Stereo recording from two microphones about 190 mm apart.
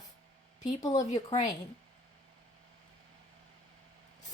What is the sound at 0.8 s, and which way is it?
Speech, 20° left (ahead or behind).